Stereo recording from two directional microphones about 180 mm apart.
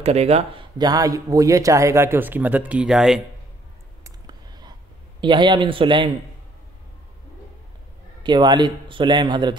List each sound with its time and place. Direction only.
0.0 s speech: 35° right (ahead or behind); by 3.2 s centre (ahead or behind)
4.0 s a sound: 20° right (ahead or behind)
5.2 s speech: 25° right (ahead or behind)
8.2 s speech: 25° right (ahead or behind)